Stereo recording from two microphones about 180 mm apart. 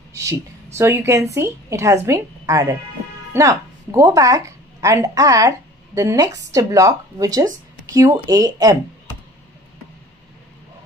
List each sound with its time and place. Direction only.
0.1 s a woman's voice: 15° right (ahead or behind)